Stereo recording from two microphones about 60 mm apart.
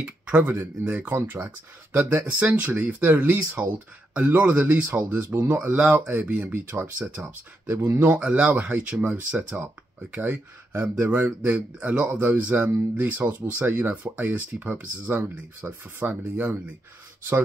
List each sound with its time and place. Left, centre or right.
0.0 s speech: right
7.6 s speech: right
8.2 s speech: centre